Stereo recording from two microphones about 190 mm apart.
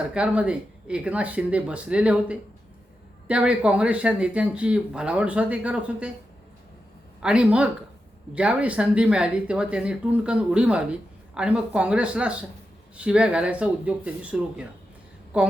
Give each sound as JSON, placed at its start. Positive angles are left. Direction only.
{"t": 0.1, "sound": "speech", "side_deg": -5}
{"t": 7.2, "sound": "speech", "side_deg": -5}